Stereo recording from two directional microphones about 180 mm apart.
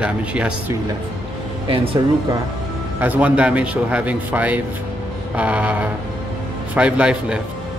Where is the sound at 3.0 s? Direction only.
10° right (ahead or behind).